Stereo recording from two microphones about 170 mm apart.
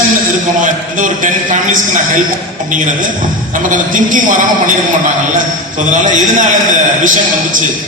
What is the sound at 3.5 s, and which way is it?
Speech, 50° right (ahead or behind).